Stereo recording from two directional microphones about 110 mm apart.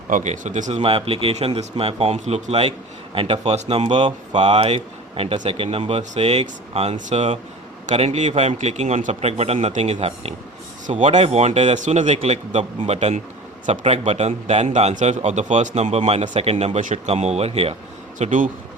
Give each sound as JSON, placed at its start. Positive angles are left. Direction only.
{"t": 0.2, "sound": "speech", "side_deg": -90}
{"t": 0.8, "sound": "a man's voice", "side_deg": -55}
{"t": 10.9, "sound": "a man's voice", "side_deg": -90}
{"t": 18.2, "sound": "speech", "side_deg": -90}